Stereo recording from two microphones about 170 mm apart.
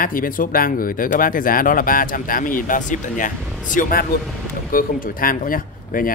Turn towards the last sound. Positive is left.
turn(degrees=55)  # may be behind; listen again after turning